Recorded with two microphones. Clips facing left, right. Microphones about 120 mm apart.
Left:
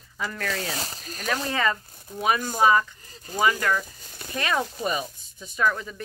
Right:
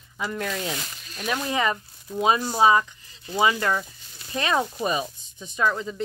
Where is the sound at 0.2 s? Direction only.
20° right (ahead or behind).